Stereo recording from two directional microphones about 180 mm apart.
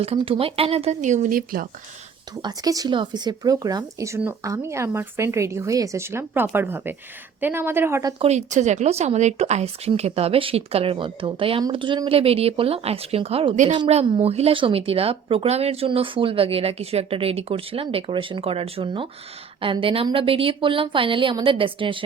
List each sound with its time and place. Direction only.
0.0 s a woman's voice: 35° right (ahead or behind); by 1.6 s 50° right (ahead or behind)
2.4 s speech: 20° right (ahead or behind)
8.2 s a woman's voice: 40° right (ahead or behind)